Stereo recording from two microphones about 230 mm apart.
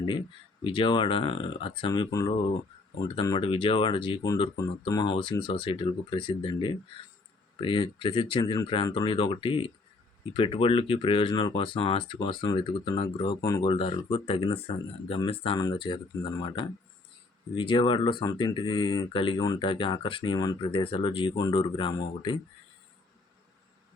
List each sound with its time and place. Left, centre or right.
0.6 s speech: left